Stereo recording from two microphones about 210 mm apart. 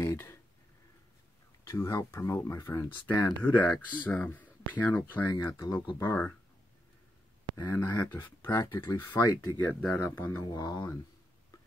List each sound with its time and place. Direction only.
0.0 s a sound: 15° left (ahead or behind)
1.6 s speech: 15° left (ahead or behind)
5.3 s speech: 20° left (ahead or behind)
7.5 s speech: 15° left (ahead or behind)